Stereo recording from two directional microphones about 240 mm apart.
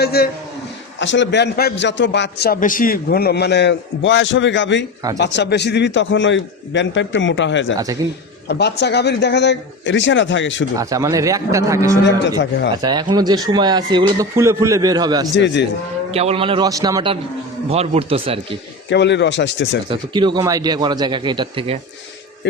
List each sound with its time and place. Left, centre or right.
0.0 s a man's voice: left
10.8 s speech: centre
12.4 s a man's voice: left
12.8 s speech: centre
15.4 s a man's voice: left
16.1 s a man's voice: right
18.9 s a man's voice: left
19.9 s a man's voice: centre